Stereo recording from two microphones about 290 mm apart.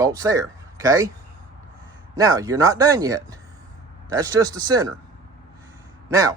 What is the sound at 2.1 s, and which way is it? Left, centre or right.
A man's voice, centre.